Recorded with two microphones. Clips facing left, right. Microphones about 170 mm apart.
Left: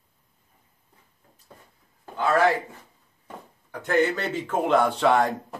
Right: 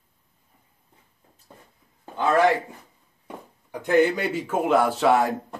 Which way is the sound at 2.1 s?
20° right (ahead or behind).